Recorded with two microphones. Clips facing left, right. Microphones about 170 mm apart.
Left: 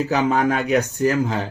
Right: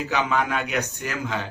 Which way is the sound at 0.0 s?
35° left (ahead or behind).